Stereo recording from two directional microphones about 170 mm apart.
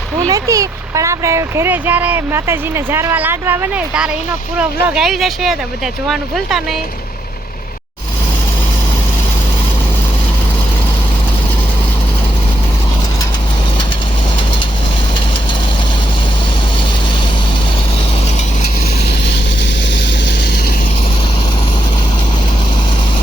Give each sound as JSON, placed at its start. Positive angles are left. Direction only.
{"t": 0.3, "sound": "speech", "side_deg": -20}
{"t": 19.8, "sound": "vehicle", "side_deg": 90}